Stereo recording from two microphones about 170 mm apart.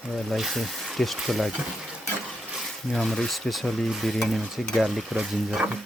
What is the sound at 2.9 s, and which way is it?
Stir, centre (ahead or behind).